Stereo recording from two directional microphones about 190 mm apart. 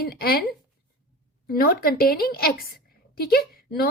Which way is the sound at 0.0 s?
55° left (ahead or behind).